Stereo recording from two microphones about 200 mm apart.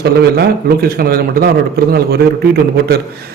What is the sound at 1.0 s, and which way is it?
Speech, 50° right (ahead or behind).